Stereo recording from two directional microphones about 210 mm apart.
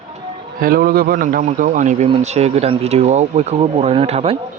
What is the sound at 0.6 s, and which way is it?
Speech, 45° right (ahead or behind).